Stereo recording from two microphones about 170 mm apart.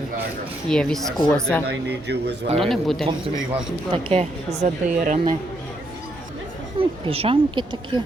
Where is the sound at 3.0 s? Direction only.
30° right (ahead or behind).